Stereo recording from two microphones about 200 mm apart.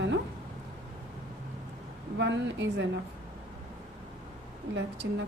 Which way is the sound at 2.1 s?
60° right (ahead or behind).